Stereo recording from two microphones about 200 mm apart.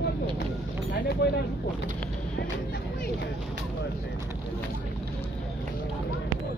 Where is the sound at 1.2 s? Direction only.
55° left (ahead or behind).